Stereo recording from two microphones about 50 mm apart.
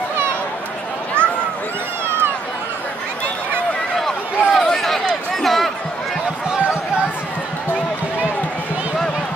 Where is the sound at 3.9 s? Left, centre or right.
Centre.